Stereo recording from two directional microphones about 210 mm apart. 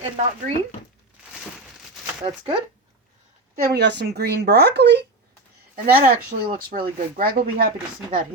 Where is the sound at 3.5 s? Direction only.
55° right (ahead or behind).